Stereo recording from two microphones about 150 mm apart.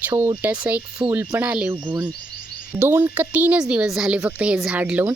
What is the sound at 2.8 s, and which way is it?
Speech, 15° right (ahead or behind).